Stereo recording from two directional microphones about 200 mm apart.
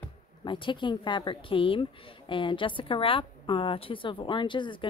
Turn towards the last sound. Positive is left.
turn(degrees=25)  # may be behind; listen again after turning